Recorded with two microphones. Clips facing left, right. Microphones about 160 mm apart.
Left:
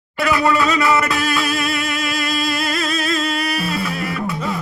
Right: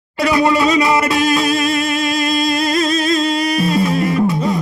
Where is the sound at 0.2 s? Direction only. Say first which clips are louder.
Right 3 dB; 35° right (ahead or behind).